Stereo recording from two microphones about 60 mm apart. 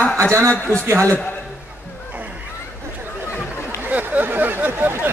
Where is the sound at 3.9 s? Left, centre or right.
Right.